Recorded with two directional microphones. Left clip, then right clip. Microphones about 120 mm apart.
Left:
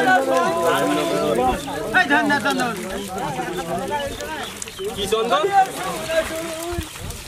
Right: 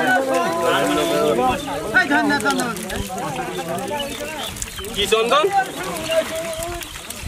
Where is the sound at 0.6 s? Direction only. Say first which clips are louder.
Right 1 dB; 10° left (ahead or behind).